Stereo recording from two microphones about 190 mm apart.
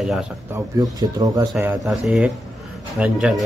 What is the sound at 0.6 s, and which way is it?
Speech, 20° right (ahead or behind).